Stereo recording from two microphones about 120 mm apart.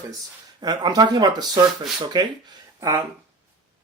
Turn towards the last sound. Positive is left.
turn(degrees=-30)  # may be behind; listen again after turning